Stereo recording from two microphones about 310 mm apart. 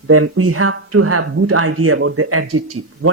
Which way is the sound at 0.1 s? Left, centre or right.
Right.